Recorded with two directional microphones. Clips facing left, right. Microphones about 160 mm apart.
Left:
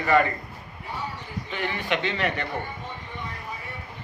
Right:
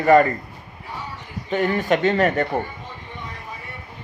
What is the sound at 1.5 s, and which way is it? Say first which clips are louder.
Speech: right 9 dB; 45° right (ahead or behind).